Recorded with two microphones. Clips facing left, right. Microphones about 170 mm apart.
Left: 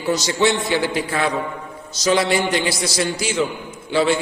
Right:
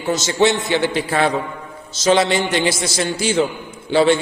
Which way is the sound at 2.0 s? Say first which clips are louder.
Right 2 dB; 25° right (ahead or behind).